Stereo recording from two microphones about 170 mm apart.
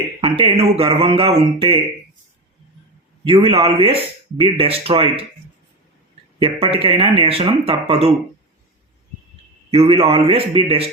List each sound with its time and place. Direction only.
0.3 s speech: 30° right (ahead or behind)
3.2 s speech: 30° right (ahead or behind)
6.6 s speech: 30° right (ahead or behind)
9.7 s speech: 30° right (ahead or behind)